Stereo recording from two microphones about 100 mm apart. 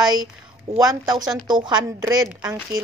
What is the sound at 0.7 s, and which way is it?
Speech, 40° right (ahead or behind).